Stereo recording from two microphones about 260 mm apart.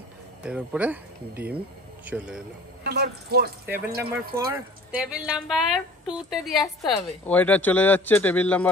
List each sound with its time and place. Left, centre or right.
0.4 s speech: centre
2.8 s speech: right
4.5 s speech: centre